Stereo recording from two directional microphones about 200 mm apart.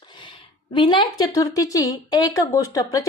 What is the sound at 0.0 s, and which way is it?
A woman's voice, 25° left (ahead or behind).